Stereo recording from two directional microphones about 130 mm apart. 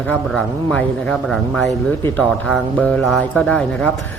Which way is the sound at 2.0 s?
20° left (ahead or behind).